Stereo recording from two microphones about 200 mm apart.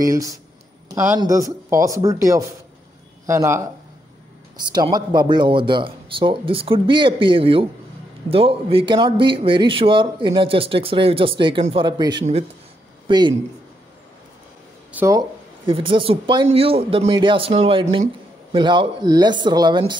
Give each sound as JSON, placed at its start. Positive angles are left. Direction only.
{"t": 0.0, "sound": "speech", "side_deg": -15}
{"t": 4.7, "sound": "a man's voice", "side_deg": -20}
{"t": 14.9, "sound": "a man's voice", "side_deg": -10}